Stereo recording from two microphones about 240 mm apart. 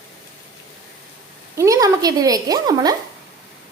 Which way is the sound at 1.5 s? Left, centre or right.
Centre.